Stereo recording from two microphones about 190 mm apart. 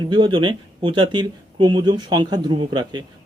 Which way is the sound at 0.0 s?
25° right (ahead or behind).